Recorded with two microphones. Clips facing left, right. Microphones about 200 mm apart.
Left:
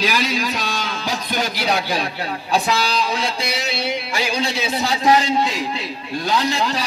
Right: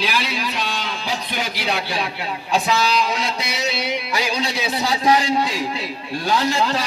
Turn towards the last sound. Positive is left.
turn(degrees=25)  # may be behind; listen again after turning